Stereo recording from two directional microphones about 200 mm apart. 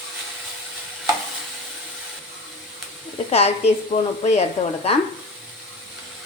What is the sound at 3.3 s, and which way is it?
A woman's voice, 30° left (ahead or behind).